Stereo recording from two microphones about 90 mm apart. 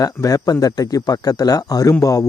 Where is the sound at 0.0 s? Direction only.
40° left (ahead or behind).